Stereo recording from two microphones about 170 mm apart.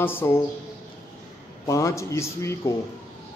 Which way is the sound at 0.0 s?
10° left (ahead or behind).